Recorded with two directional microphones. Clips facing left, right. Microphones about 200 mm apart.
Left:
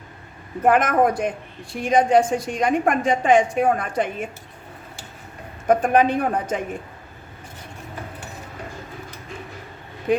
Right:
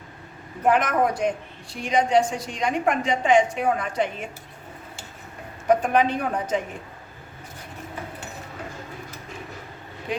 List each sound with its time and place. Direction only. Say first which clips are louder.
0.6 s a woman's voice: left 3 dB; 50° left (ahead or behind)
5.6 s a woman's voice: left 3 dB; 50° left (ahead or behind)